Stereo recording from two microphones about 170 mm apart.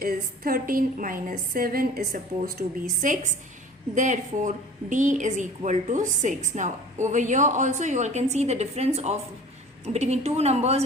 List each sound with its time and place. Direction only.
0.0 s a woman's voice: 60° right (ahead or behind); by 10.8 s 40° right (ahead or behind)